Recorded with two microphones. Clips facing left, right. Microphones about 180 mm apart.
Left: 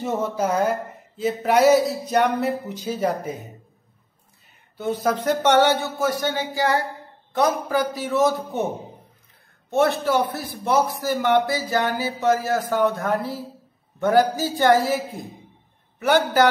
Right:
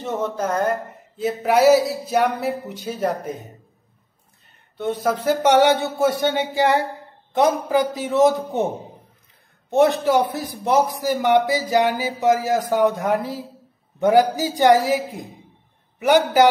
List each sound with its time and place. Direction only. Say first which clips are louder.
0.0 s speech: left 1 dB; 5° left (ahead or behind)
4.7 s a man's voice: right 1 dB; centre (ahead or behind); by 16.4 s 15° right (ahead or behind)